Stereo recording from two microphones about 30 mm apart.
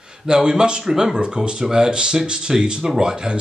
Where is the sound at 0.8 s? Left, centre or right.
Centre.